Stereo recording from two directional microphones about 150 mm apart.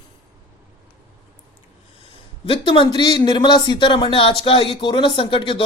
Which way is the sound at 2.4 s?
35° left (ahead or behind).